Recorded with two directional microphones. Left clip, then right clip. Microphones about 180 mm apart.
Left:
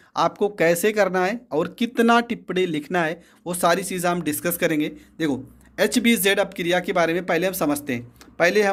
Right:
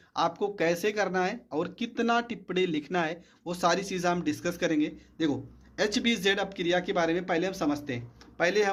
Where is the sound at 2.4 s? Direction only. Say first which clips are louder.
Left 5 dB; 20° left (ahead or behind).